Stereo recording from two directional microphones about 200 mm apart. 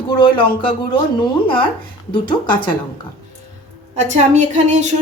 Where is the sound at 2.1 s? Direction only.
25° left (ahead or behind).